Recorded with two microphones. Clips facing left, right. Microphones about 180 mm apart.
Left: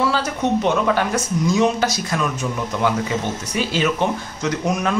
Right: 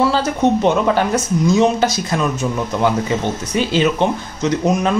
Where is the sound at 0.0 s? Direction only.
25° right (ahead or behind).